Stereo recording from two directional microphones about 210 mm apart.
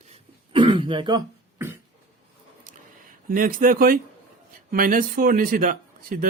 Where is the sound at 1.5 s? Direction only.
10° right (ahead or behind).